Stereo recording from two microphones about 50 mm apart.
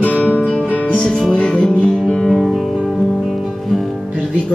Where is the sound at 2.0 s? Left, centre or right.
Centre.